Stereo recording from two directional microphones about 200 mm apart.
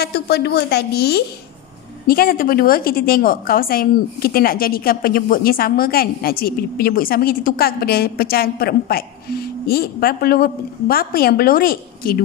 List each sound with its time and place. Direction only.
0.0 s a woman's voice: 50° left (ahead or behind)